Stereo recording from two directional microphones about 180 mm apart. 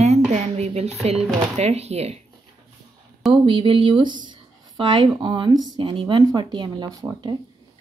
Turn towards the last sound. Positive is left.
turn(degrees=-20)  # may be behind; listen again after turning